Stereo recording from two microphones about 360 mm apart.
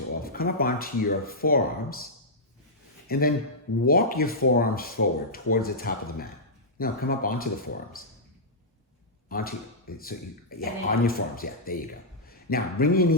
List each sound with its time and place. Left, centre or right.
0.2 s speech: left
3.1 s speech: left
9.3 s speech: left